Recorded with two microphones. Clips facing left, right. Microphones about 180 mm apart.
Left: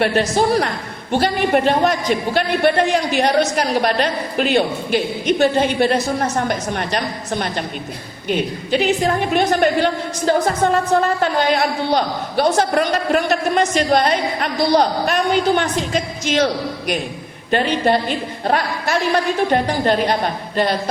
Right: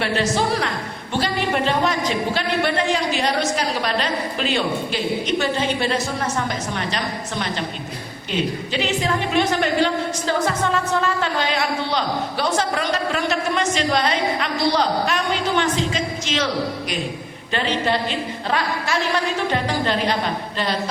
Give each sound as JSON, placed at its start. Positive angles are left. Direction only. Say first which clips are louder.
{"t": 0.0, "sound": "a woman's voice", "louder": "left 4 dB", "side_deg": 45}